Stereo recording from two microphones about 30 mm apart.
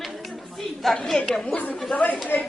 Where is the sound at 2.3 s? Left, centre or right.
Left.